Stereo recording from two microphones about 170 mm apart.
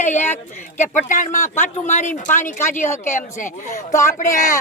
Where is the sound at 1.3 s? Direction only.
15° left (ahead or behind).